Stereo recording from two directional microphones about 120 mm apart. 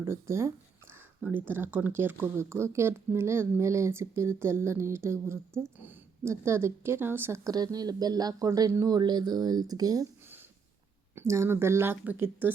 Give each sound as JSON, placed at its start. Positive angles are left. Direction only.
{"t": 0.0, "sound": "speech", "side_deg": -25}
{"t": 7.5, "sound": "speech", "side_deg": -35}
{"t": 11.1, "sound": "speech", "side_deg": -25}